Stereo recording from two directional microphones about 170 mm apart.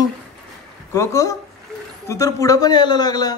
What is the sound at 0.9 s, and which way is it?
A man's voice, 20° left (ahead or behind).